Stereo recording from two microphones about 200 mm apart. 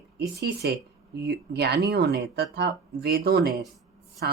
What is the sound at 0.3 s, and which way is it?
Speech, 55° right (ahead or behind).